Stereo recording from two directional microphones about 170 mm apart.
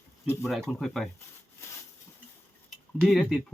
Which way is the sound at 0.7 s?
Centre (ahead or behind).